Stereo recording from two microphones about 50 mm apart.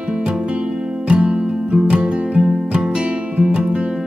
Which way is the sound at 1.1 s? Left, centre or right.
Right.